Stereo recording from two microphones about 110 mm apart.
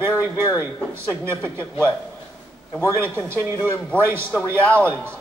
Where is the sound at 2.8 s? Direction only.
20° right (ahead or behind).